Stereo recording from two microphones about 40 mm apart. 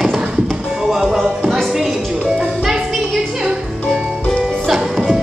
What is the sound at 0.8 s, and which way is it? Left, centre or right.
Music, centre.